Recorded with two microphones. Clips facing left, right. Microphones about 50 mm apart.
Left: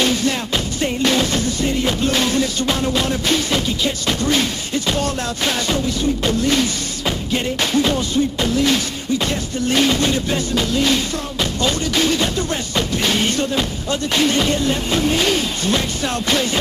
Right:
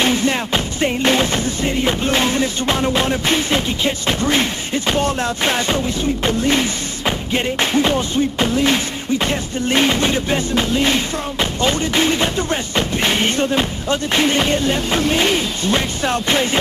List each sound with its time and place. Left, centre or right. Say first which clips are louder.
0.0 s music: right 2 dB; right